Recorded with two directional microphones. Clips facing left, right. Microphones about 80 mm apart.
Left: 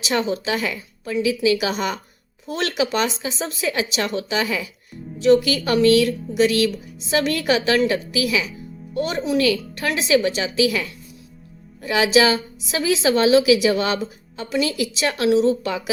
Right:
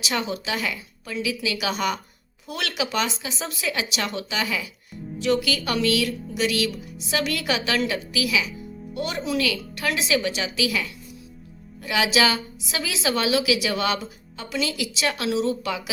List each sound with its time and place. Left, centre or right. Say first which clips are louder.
0.0 s a woman's voice: left 5 dB; left